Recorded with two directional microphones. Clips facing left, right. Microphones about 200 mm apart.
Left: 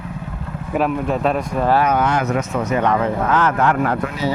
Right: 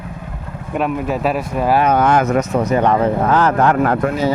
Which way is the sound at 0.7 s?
Centre (ahead or behind).